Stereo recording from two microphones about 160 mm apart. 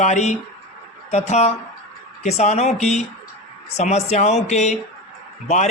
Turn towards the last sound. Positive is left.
turn(degrees=45)  # may be behind; listen again after turning